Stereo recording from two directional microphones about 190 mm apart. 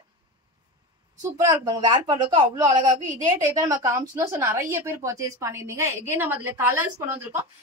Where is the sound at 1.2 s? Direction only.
20° right (ahead or behind).